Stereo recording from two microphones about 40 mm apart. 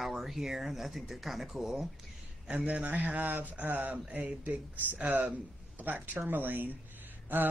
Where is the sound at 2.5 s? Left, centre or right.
Right.